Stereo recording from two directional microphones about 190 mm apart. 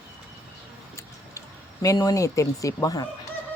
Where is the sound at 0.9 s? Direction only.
15° left (ahead or behind).